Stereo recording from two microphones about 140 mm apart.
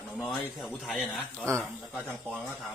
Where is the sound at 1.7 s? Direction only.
10° right (ahead or behind).